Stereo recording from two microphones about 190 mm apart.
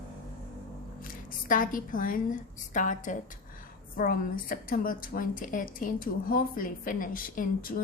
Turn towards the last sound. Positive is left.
turn(degrees=50)  # may be behind; listen again after turning